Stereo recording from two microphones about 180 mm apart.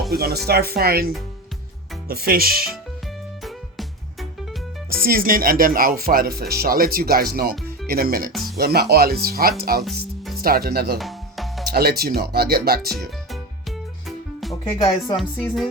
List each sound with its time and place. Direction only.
0.1 s speech: 60° right (ahead or behind)
3.4 s music: centre (ahead or behind)
5.0 s speech: 50° right (ahead or behind)
8.3 s music: centre (ahead or behind)
8.5 s speech: 60° right (ahead or behind)
10.9 s music: centre (ahead or behind)
11.7 s speech: 60° right (ahead or behind)
12.9 s music: centre (ahead or behind)
14.7 s music: 25° left (ahead or behind)
15.1 s music: centre (ahead or behind)